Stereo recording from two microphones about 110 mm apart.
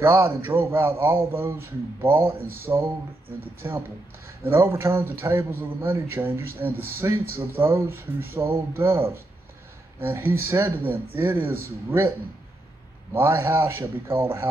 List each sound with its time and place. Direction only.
0.0 s a man's voice: 20° right (ahead or behind)
13.1 s a man's voice: 20° right (ahead or behind)